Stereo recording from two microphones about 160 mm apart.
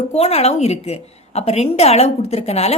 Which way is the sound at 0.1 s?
40° left (ahead or behind).